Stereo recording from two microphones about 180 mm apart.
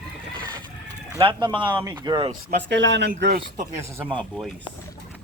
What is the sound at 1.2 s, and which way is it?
Speech, 25° right (ahead or behind).